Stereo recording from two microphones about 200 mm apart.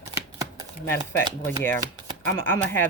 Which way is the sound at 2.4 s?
10° left (ahead or behind).